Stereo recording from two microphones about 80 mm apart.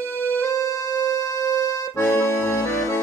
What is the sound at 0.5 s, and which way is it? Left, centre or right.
Music, left.